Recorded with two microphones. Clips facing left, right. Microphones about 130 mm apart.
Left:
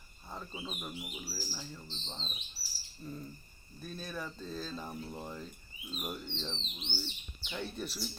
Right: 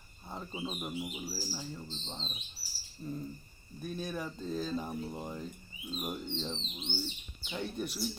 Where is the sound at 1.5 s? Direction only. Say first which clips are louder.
Right 4 dB; 5° right (ahead or behind).